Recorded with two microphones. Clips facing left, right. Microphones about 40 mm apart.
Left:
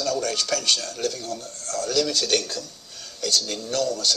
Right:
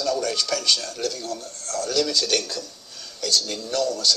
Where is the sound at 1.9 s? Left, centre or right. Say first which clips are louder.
Even; left.